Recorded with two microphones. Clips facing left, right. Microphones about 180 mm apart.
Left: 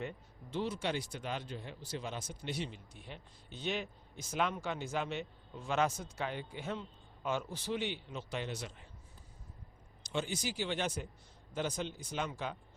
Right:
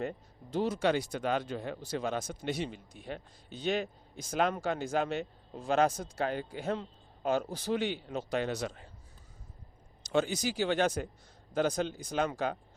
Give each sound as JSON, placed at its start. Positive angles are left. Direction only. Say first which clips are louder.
{"t": 0.0, "sound": "speech", "louder": "right 6 dB", "side_deg": -40}
{"t": 1.1, "sound": "speech", "louder": "right 9 dB", "side_deg": -65}
{"t": 1.8, "sound": "speech", "louder": "right 7 dB", "side_deg": -50}
{"t": 10.0, "sound": "a sound", "louder": "right 8 dB", "side_deg": -40}
{"t": 10.6, "sound": "speech", "louder": "right 9 dB", "side_deg": -45}